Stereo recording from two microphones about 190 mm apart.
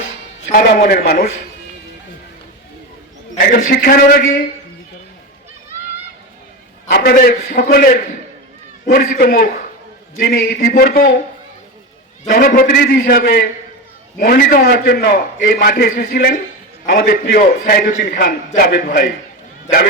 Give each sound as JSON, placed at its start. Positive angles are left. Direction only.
{"t": 0.5, "sound": "a man's voice", "side_deg": 50}
{"t": 3.4, "sound": "a man's voice", "side_deg": 45}
{"t": 6.9, "sound": "a man's voice", "side_deg": 55}
{"t": 12.3, "sound": "a man's voice", "side_deg": 50}